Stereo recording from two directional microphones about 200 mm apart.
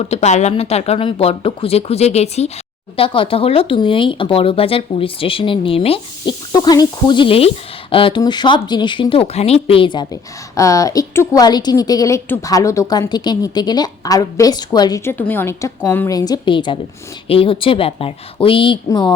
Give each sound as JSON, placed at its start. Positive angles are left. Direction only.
{"t": 0.0, "sound": "a woman's voice", "side_deg": 30}